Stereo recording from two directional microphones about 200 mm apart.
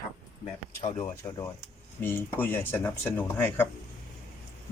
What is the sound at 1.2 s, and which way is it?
Speech, 15° left (ahead or behind).